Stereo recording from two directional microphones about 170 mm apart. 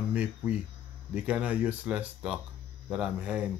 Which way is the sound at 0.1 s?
10° right (ahead or behind).